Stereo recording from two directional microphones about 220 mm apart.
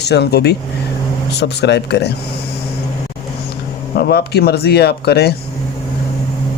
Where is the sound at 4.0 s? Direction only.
45° left (ahead or behind).